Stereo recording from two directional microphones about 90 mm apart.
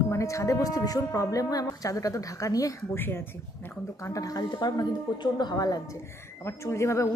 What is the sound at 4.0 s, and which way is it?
Speech, 40° left (ahead or behind).